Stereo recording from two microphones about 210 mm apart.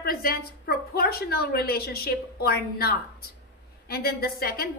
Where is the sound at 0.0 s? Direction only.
45° left (ahead or behind).